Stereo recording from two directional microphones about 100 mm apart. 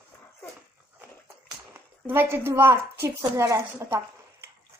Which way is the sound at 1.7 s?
25° right (ahead or behind).